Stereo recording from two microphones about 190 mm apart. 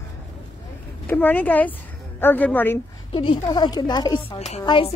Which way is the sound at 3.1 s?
30° left (ahead or behind).